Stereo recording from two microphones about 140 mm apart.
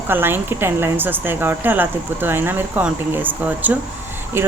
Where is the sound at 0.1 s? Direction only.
15° right (ahead or behind).